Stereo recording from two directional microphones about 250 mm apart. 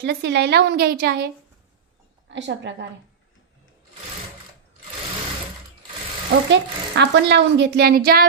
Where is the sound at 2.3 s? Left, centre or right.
Right.